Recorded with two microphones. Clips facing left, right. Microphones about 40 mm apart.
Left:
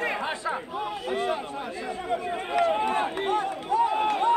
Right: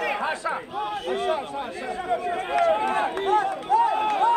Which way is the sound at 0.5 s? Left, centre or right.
Centre.